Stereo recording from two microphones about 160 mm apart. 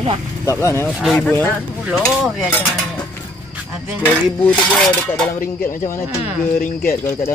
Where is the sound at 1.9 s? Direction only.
Centre (ahead or behind).